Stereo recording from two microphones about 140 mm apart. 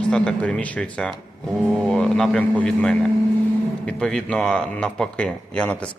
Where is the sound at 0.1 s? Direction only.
5° left (ahead or behind).